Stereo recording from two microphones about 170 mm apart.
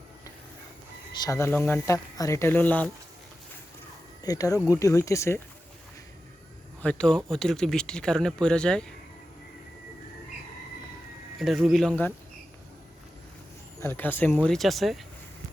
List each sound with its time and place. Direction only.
1.1 s speech: 20° left (ahead or behind)
4.2 s speech: 20° left (ahead or behind)
6.8 s speech: 5° left (ahead or behind)
11.3 s speech: centre (ahead or behind)
13.8 s speech: 10° left (ahead or behind)